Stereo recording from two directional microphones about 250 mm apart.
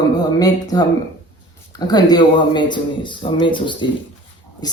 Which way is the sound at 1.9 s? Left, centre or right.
Centre.